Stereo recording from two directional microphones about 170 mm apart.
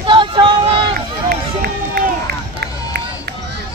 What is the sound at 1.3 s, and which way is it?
Run, 60° right (ahead or behind).